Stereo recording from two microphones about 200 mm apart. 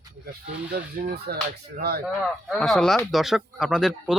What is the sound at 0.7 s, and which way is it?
Speech, 50° right (ahead or behind).